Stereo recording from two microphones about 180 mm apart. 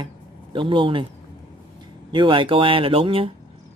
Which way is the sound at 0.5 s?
25° right (ahead or behind).